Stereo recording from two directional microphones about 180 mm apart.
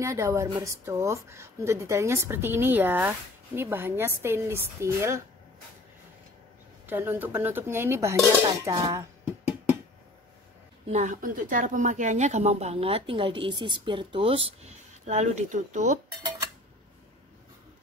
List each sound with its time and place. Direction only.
0.0 s a woman's voice: 15° right (ahead or behind)
6.9 s a woman's voice: 10° right (ahead or behind)
10.9 s speech: 40° right (ahead or behind)
15.0 s speech: 40° right (ahead or behind)